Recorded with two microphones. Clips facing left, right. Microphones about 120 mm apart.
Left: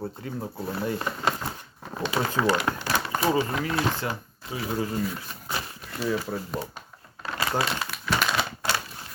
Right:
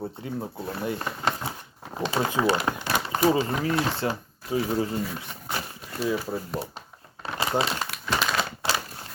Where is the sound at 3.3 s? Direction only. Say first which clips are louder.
Right 1 dB; 30° right (ahead or behind).